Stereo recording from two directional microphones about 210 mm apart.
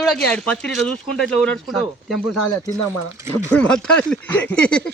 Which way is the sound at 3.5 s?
5° left (ahead or behind).